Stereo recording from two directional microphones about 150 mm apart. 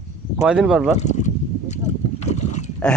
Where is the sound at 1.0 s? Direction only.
50° left (ahead or behind).